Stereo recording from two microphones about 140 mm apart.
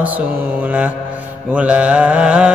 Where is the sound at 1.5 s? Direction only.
10° right (ahead or behind).